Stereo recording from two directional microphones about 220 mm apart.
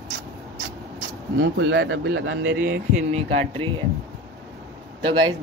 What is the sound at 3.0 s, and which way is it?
Speech, 30° right (ahead or behind).